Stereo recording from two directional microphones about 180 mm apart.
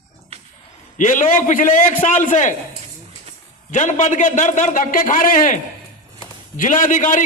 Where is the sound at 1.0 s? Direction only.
45° left (ahead or behind).